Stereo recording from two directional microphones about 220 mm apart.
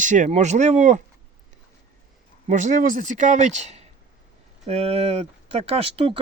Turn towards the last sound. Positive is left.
turn(degrees=-25)  # may be behind; listen again after turning